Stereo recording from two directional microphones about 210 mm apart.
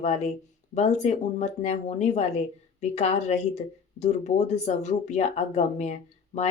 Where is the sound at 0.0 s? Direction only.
30° left (ahead or behind).